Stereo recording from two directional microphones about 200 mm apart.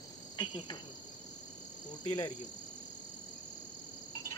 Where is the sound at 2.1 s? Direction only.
20° left (ahead or behind).